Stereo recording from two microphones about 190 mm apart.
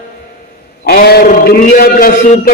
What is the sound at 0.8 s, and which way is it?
A man's voice, 55° left (ahead or behind).